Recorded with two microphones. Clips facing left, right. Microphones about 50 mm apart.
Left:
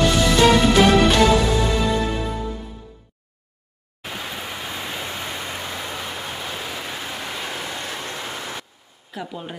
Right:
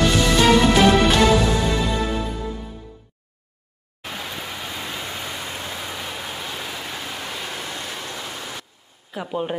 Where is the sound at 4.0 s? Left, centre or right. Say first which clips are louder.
Left 1 dB; centre.